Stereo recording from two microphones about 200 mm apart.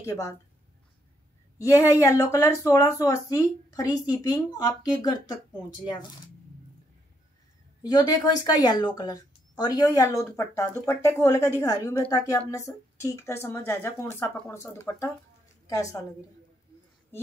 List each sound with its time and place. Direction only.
0.0 s a woman's voice: 15° left (ahead or behind)
1.6 s a woman's voice: 15° left (ahead or behind)
7.8 s a woman's voice: 20° left (ahead or behind)